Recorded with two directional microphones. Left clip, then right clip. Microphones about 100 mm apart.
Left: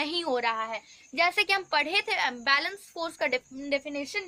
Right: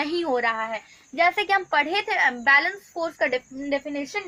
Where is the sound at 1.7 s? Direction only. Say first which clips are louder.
Right 4 dB; 15° left (ahead or behind).